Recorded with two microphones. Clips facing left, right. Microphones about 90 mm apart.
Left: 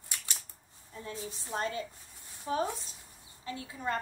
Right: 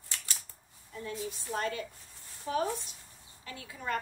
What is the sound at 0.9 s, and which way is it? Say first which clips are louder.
A woman's voice: right 3 dB; 30° left (ahead or behind).